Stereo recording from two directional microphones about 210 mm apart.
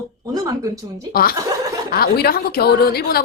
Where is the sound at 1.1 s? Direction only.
45° left (ahead or behind).